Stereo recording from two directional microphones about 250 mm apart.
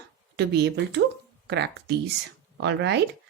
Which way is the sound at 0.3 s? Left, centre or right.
Right.